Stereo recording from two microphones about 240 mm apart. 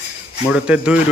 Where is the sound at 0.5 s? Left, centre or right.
Centre.